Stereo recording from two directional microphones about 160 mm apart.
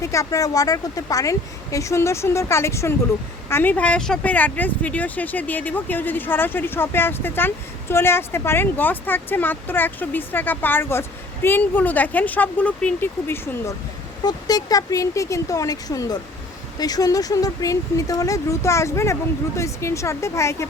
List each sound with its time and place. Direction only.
0.0 s speech: 20° left (ahead or behind)